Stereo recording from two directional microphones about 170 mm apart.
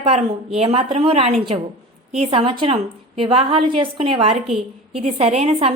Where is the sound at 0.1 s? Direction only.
40° right (ahead or behind).